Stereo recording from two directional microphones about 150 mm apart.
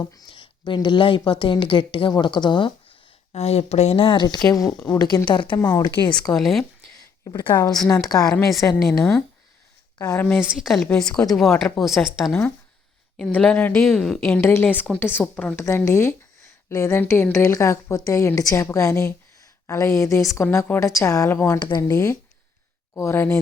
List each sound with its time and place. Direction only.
0.3 s a woman's voice: 30° left (ahead or behind)
3.3 s a woman's voice: 45° left (ahead or behind)
5.5 s a woman's voice: 20° left (ahead or behind)
6.3 s speech: centre (ahead or behind)
7.4 s a woman's voice: 15° left (ahead or behind)
8.3 s a woman's voice: centre (ahead or behind)
10.0 s a woman's voice: 20° left (ahead or behind)
10.4 s a woman's voice: 5° right (ahead or behind)
14.3 s a woman's voice: 15° left (ahead or behind)
15.6 s a woman's voice: 20° left (ahead or behind)